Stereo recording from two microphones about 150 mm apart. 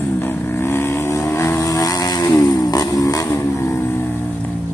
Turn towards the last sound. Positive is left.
turn(degrees=20)  # may be behind; listen again after turning